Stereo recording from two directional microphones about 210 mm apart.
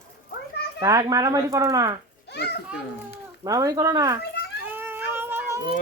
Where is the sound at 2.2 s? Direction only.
50° left (ahead or behind).